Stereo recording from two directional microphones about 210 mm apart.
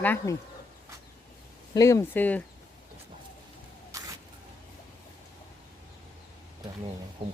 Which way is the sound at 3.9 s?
15° right (ahead or behind).